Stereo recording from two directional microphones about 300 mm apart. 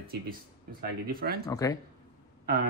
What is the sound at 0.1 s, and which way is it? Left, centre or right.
Speech, right.